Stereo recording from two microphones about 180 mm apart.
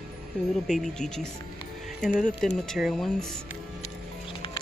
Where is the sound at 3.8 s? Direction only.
30° left (ahead or behind).